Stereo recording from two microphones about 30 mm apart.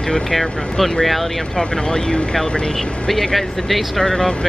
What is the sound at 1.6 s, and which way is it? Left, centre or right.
Speech, left.